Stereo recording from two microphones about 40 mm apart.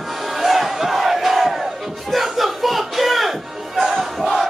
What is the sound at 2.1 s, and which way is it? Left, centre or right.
Music, centre.